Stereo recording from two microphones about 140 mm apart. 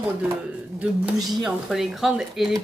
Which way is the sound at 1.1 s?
25° right (ahead or behind).